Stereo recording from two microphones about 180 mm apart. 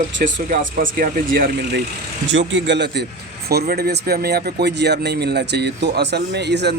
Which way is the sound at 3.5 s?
60° right (ahead or behind).